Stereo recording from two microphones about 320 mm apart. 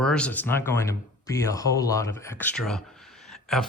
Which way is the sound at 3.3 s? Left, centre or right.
Centre.